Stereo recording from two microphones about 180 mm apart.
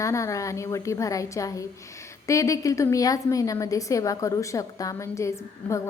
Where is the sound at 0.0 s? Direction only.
15° left (ahead or behind).